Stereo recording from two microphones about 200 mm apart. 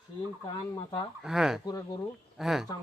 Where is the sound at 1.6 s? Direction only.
20° left (ahead or behind).